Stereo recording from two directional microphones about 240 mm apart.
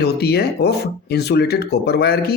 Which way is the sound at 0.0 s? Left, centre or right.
Left.